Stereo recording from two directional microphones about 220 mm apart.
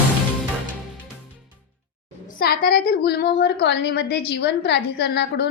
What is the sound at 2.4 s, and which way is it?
A woman's voice, 45° left (ahead or behind).